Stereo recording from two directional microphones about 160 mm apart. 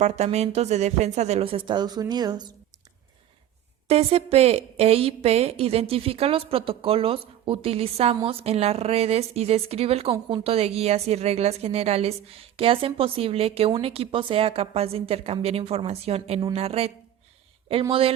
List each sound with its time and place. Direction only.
0.0 s speech: 45° right (ahead or behind); by 2.5 s 25° right (ahead or behind)
3.8 s a woman's voice: 40° right (ahead or behind)